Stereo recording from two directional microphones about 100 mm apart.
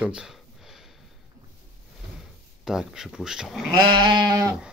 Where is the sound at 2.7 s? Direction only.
5° right (ahead or behind).